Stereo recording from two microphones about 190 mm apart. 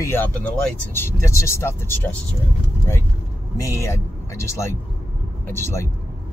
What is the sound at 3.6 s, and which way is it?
Speech, 15° left (ahead or behind).